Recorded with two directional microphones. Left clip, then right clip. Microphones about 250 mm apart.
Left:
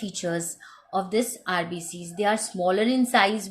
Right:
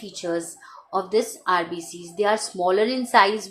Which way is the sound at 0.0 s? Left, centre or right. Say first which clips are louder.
Right 2 dB; left.